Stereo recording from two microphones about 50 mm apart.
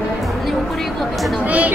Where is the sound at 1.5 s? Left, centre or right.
Right.